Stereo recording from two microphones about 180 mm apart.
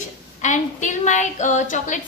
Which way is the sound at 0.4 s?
45° left (ahead or behind).